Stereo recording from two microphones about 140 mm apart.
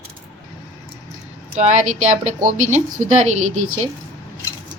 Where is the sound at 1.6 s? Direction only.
60° right (ahead or behind).